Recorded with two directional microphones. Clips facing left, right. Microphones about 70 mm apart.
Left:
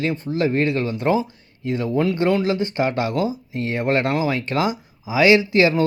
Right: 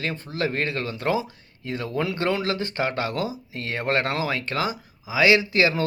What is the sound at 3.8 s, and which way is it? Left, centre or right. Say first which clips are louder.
Speech: left 4 dB; centre.